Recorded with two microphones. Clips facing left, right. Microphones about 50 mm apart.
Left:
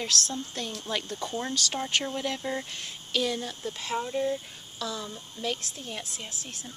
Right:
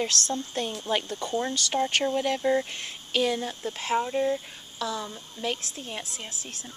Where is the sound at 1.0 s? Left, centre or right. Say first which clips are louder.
Right 4 dB; centre.